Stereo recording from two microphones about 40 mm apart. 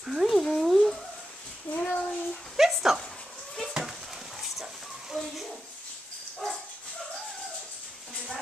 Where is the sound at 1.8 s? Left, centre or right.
Left.